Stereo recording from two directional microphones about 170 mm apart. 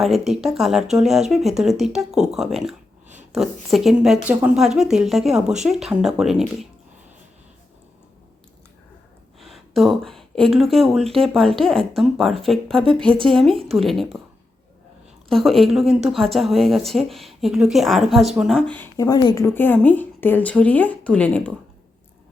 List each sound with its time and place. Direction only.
0.0 s speech: centre (ahead or behind)
9.4 s speech: centre (ahead or behind)
12.8 s speech: 30° right (ahead or behind)
13.2 s speech: centre (ahead or behind)
15.3 s speech: centre (ahead or behind)
18.9 s speech: 20° left (ahead or behind)
19.5 s a woman's voice: 10° left (ahead or behind)